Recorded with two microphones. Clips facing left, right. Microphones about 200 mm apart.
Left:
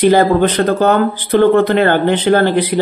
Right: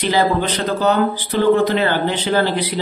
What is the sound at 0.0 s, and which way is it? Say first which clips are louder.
Speech: left 7 dB; 50° left (ahead or behind).